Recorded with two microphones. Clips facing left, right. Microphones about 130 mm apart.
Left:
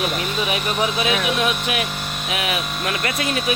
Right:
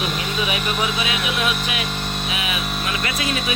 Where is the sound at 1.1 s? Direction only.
40° left (ahead or behind).